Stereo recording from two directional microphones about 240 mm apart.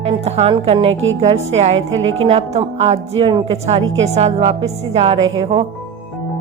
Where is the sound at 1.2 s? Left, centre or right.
Right.